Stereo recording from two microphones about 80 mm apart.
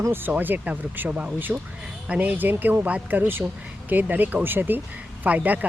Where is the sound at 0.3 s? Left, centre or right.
Right.